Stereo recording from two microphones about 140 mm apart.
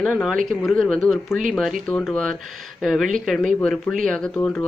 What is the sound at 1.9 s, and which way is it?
Speech, 10° left (ahead or behind).